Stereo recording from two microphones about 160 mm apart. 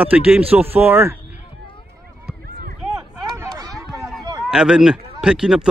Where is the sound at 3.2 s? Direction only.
20° right (ahead or behind).